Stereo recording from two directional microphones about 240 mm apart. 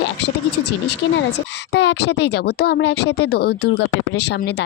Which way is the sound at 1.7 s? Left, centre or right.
Left.